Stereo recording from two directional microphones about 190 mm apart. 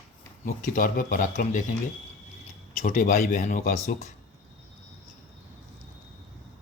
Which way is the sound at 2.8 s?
45° left (ahead or behind).